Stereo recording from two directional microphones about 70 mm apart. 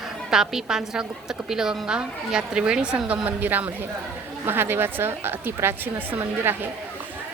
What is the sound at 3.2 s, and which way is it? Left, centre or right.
A woman's voice, right.